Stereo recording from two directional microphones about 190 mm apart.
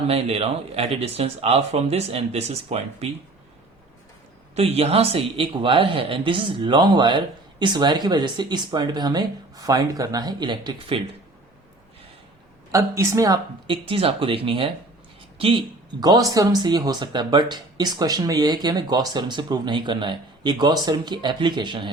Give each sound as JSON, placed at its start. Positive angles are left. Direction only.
{"t": 0.1, "sound": "speech", "side_deg": -30}
{"t": 4.5, "sound": "speech", "side_deg": -30}
{"t": 12.7, "sound": "speech", "side_deg": -15}